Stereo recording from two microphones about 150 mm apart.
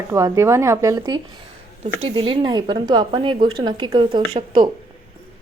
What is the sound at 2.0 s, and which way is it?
A woman's voice, 35° right (ahead or behind).